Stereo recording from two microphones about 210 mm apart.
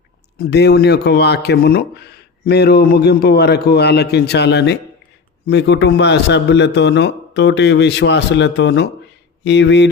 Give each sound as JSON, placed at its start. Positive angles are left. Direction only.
{"t": 0.3, "sound": "a man's voice", "side_deg": 50}